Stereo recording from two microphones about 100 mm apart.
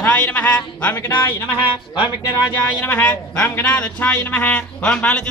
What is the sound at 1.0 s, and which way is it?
Speech, 20° left (ahead or behind).